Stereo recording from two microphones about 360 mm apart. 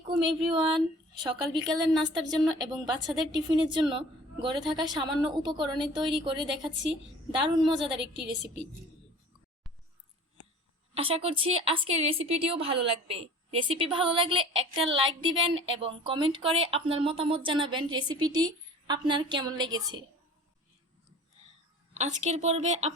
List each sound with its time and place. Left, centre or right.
0.4 s a woman's voice: centre
10.9 s a woman's voice: centre
21.9 s a woman's voice: centre